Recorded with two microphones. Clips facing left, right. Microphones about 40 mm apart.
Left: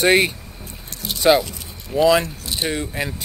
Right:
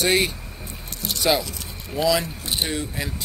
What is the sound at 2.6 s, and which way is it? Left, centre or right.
Speech, left.